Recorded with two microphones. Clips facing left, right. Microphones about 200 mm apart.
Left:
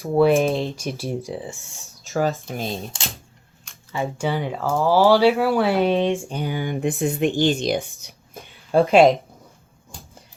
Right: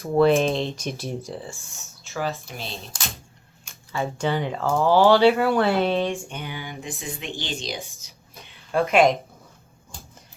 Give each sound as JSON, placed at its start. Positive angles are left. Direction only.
{"t": 0.0, "sound": "speech", "side_deg": 10}
{"t": 1.2, "sound": "speech", "side_deg": 15}
{"t": 2.5, "sound": "speech", "side_deg": 50}
{"t": 3.9, "sound": "speech", "side_deg": 15}
{"t": 5.6, "sound": "speech", "side_deg": 15}
{"t": 6.1, "sound": "speech", "side_deg": 35}
{"t": 6.4, "sound": "speech", "side_deg": 50}
{"t": 8.0, "sound": "a sound", "side_deg": 50}
{"t": 8.7, "sound": "speech", "side_deg": 30}